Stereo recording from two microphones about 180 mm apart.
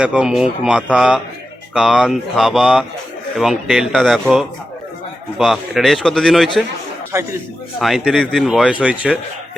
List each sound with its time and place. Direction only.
0.0 s speech: 5° right (ahead or behind)
7.1 s speech: 15° right (ahead or behind)
7.8 s speech: centre (ahead or behind)